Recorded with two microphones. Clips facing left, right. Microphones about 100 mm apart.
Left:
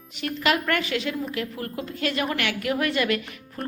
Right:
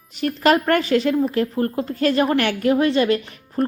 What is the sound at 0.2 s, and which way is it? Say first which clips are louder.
A woman's voice: right 7 dB; 40° right (ahead or behind).